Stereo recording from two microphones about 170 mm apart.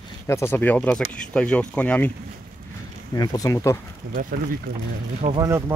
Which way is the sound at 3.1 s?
20° left (ahead or behind).